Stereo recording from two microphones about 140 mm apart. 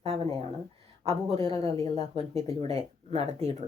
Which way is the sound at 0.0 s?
45° right (ahead or behind).